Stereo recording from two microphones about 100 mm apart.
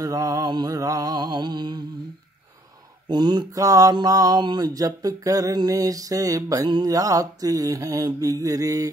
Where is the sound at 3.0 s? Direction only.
50° right (ahead or behind).